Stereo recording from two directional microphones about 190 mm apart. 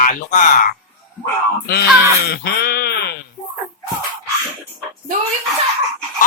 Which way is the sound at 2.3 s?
55° left (ahead or behind).